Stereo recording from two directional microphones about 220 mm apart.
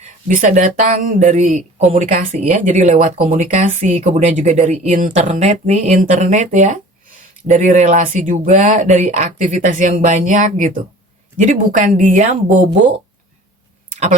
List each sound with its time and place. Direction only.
0.0 s speech: 35° right (ahead or behind)